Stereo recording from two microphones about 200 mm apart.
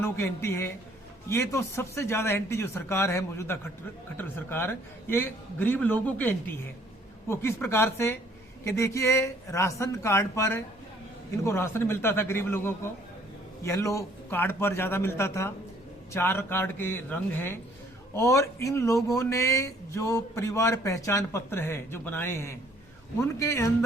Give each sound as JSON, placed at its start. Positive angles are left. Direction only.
{"t": 0.0, "sound": "speech", "side_deg": 10}